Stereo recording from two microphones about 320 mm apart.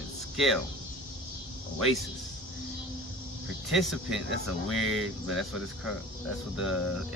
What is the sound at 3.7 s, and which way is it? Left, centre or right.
Speech, centre.